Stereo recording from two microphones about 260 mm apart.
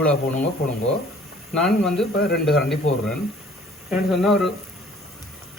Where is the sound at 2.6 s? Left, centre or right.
Centre.